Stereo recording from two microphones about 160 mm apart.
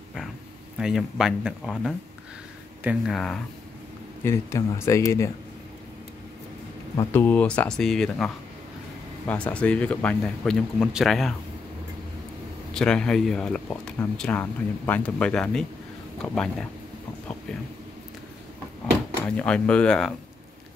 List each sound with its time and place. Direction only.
0.7 s speech: centre (ahead or behind)
3.1 s speech: 5° left (ahead or behind)
4.2 s speech: 20° left (ahead or behind)
7.0 s speech: 15° left (ahead or behind)
9.3 s speech: 10° left (ahead or behind)
12.7 s speech: 5° left (ahead or behind)
19.2 s speech: 5° left (ahead or behind)